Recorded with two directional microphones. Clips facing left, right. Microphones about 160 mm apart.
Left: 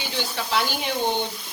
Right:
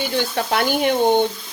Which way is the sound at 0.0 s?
50° right (ahead or behind).